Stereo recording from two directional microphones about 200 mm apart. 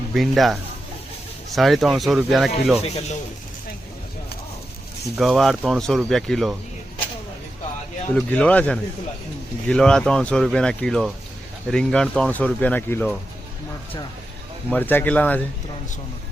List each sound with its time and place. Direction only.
0.1 s speech: centre (ahead or behind)
2.8 s speech: 30° left (ahead or behind)
5.1 s speech: centre (ahead or behind)
8.1 s speech: 5° left (ahead or behind)
14.7 s speech: 10° left (ahead or behind)